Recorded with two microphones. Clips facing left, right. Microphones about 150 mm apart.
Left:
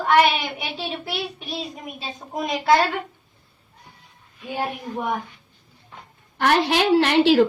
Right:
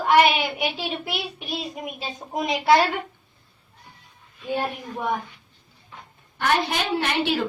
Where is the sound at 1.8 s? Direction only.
15° right (ahead or behind).